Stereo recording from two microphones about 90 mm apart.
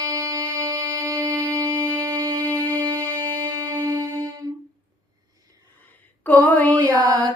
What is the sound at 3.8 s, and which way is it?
Music, 45° right (ahead or behind).